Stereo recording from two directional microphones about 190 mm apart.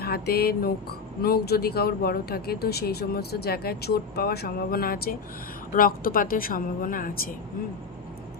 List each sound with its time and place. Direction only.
0.0 s speech: 55° left (ahead or behind)